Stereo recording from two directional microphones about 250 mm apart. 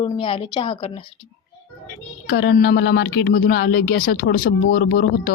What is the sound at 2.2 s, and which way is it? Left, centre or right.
Speech, left.